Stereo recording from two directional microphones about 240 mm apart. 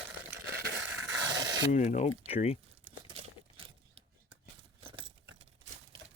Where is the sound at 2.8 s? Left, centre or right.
Right.